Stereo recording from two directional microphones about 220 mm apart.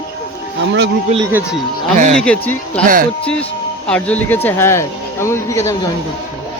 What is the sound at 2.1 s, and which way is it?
Speech, 5° left (ahead or behind).